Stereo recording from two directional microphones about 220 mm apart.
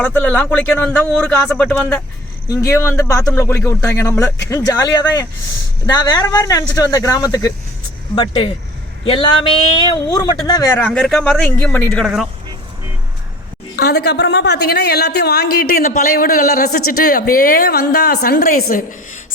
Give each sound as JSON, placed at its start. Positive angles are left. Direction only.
{"t": 0.0, "sound": "speech", "side_deg": 5}
{"t": 2.5, "sound": "speech", "side_deg": 15}
{"t": 8.1, "sound": "a sound", "side_deg": 20}
{"t": 9.9, "sound": "speech", "side_deg": 20}
{"t": 13.7, "sound": "a woman's voice", "side_deg": 45}